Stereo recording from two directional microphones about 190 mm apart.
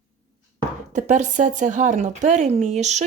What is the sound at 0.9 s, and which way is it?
Speech, 40° right (ahead or behind).